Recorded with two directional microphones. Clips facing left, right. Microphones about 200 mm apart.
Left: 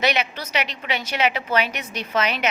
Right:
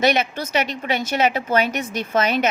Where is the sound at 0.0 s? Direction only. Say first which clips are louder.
Right 4 dB; 45° right (ahead or behind).